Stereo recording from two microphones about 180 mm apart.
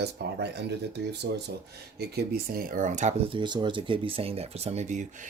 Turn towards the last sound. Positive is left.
turn(degrees=-45)  # may be behind; listen again after turning